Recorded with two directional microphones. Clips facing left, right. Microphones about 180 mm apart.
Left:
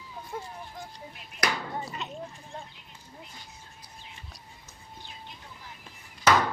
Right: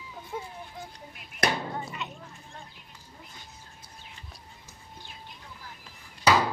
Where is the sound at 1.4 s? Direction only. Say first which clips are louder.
Right 3 dB; 20° right (ahead or behind).